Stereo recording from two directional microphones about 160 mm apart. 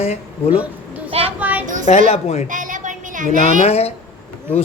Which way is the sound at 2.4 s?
55° right (ahead or behind).